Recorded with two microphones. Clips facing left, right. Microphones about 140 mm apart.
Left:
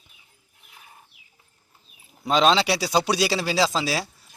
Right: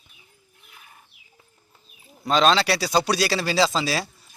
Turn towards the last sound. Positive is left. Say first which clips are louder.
# right 1 dB
turn(degrees=10)  # may be behind; listen again after turning